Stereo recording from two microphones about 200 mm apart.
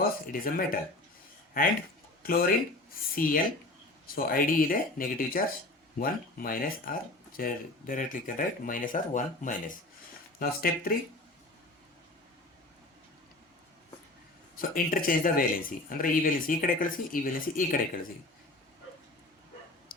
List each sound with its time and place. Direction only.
0.0 s speech: 45° left (ahead or behind)
2.2 s speech: 45° left (ahead or behind)
14.5 s speech: 45° left (ahead or behind)